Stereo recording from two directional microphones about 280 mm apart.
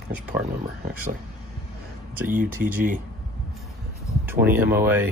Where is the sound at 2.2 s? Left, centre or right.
Right.